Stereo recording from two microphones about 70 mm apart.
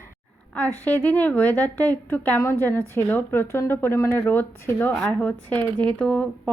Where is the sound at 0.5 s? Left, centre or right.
Left.